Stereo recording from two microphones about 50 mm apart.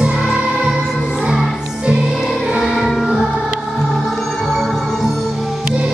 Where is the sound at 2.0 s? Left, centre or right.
Centre.